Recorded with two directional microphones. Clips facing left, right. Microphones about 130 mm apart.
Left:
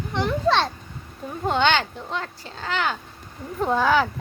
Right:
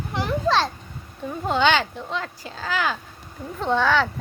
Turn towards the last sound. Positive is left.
turn(degrees=5)  # may be behind; listen again after turning